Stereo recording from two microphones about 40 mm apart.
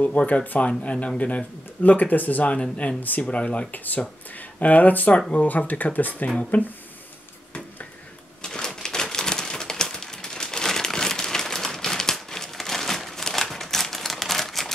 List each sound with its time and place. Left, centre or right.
0.3 s speech: left
2.6 s speech: left
3.0 s speech: left
3.3 s speech: left
3.7 s speech: left
6.2 s speech: left
8.4 s typewriter: centre